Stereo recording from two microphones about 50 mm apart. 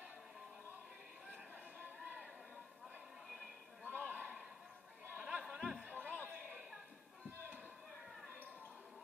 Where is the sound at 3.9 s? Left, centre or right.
Right.